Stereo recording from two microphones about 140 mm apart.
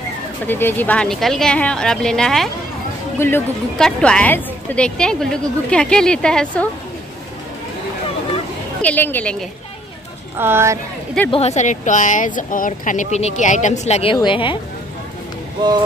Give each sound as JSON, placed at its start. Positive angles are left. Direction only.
{"t": 0.5, "sound": "speech", "side_deg": 15}
{"t": 3.2, "sound": "a woman's voice", "side_deg": 15}
{"t": 3.7, "sound": "a woman's voice", "side_deg": 5}
{"t": 8.8, "sound": "a woman's voice", "side_deg": 15}
{"t": 10.3, "sound": "speech", "side_deg": -15}
{"t": 11.2, "sound": "speech", "side_deg": 45}
{"t": 14.2, "sound": "speech", "side_deg": 35}